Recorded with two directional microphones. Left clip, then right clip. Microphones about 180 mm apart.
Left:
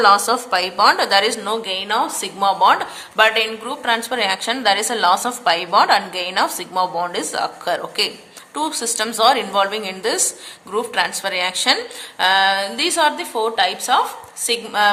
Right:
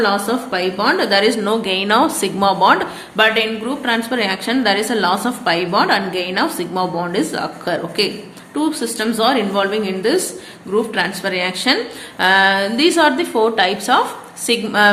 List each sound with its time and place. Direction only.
0.0 s a woman's voice: 35° left (ahead or behind); by 14.8 s 15° left (ahead or behind)